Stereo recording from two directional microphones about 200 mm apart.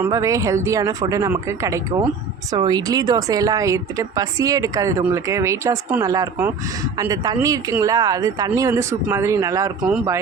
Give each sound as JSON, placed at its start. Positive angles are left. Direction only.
{"t": 0.0, "sound": "speech", "side_deg": -15}